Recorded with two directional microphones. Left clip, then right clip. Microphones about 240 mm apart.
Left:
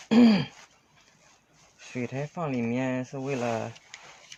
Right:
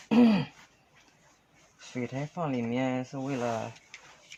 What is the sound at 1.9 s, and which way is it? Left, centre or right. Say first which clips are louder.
Speech: left 2 dB; left.